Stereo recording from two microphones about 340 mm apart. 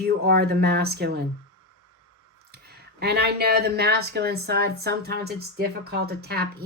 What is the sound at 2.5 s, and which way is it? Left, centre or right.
Speech, right.